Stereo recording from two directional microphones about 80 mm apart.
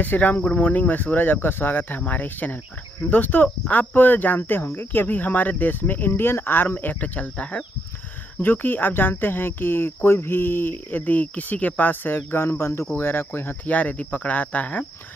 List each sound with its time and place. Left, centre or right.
0.0 s speech: left